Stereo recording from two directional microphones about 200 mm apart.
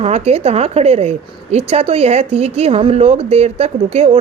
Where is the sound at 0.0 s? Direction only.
30° right (ahead or behind).